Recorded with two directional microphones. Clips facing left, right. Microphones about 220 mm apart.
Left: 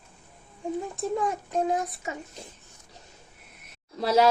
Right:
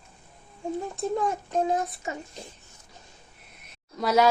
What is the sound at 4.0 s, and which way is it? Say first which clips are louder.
Speech: even; 30° left (ahead or behind).